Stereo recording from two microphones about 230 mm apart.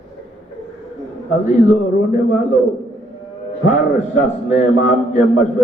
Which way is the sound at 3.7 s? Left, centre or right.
Left.